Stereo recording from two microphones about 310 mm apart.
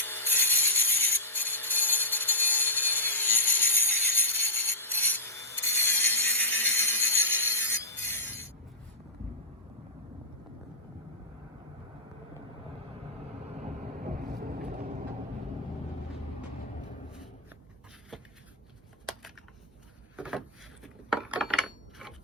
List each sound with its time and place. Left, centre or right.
0.0 s music: centre
14.3 s vehicle: right
20.1 s a sound: centre